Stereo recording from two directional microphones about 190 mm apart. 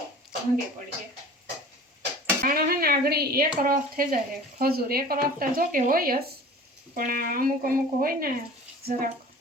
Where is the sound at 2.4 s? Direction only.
50° right (ahead or behind).